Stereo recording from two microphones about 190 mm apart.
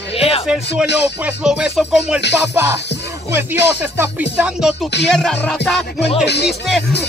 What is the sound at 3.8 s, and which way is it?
Music, 10° right (ahead or behind).